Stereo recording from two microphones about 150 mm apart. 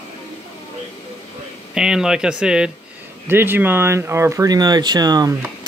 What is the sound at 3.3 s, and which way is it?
Speech, 15° right (ahead or behind).